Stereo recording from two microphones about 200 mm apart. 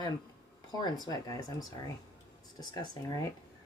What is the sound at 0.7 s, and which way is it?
A woman's voice, 20° left (ahead or behind).